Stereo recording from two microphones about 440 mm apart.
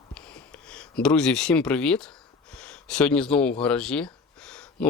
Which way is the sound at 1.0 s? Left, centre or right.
Centre.